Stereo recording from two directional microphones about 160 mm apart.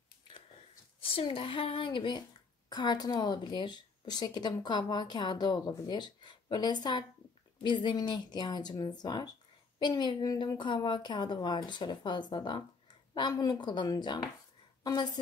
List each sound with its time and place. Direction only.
1.0 s a woman's voice: 35° left (ahead or behind)